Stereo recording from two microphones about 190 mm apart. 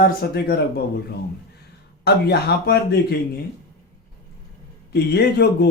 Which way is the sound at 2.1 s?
60° left (ahead or behind).